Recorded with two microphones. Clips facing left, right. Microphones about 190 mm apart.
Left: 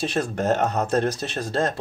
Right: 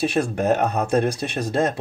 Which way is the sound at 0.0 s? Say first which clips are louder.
Right 3 dB; 10° right (ahead or behind).